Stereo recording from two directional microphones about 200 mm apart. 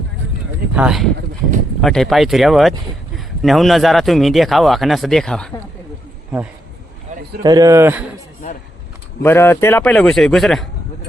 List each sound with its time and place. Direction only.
0.8 s a man's voice: centre (ahead or behind)
7.1 s a sound: 40° right (ahead or behind)
7.4 s a man's voice: 20° right (ahead or behind)
9.2 s a man's voice: 10° left (ahead or behind)